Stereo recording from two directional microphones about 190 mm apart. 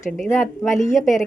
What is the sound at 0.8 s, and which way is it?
Speech, 40° left (ahead or behind).